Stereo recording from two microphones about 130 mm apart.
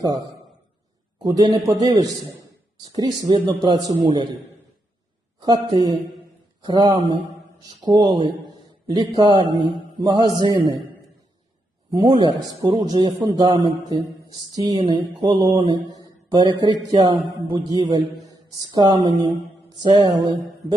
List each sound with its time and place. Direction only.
1.2 s speech: 30° right (ahead or behind)
3.3 s a man's voice: 40° right (ahead or behind)
5.4 s a man's voice: 30° right (ahead or behind)
11.9 s a man's voice: 35° right (ahead or behind)